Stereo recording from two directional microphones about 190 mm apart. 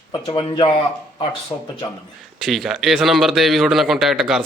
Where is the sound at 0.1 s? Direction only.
25° left (ahead or behind).